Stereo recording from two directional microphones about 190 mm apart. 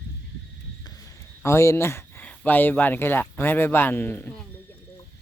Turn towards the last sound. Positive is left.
turn(degrees=10)  # may be behind; listen again after turning